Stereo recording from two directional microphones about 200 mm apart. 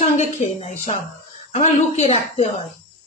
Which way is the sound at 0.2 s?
35° left (ahead or behind).